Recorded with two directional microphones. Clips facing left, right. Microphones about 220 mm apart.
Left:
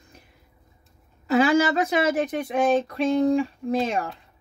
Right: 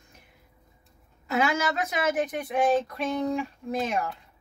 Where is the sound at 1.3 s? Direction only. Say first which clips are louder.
Left 7 dB; 30° left (ahead or behind).